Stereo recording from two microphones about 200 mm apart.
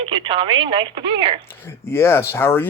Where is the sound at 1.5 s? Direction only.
10° left (ahead or behind).